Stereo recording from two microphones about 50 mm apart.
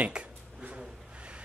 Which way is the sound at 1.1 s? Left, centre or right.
Right.